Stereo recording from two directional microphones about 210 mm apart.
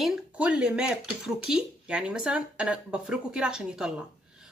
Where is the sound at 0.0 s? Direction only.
5° right (ahead or behind).